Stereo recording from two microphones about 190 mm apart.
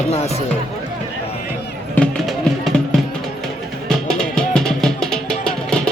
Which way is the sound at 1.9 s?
Centre (ahead or behind).